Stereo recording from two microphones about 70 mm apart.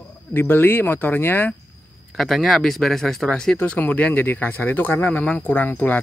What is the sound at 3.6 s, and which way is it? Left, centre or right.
Speech, centre.